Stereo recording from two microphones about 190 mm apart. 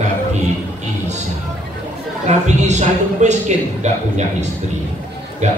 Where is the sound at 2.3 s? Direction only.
35° right (ahead or behind).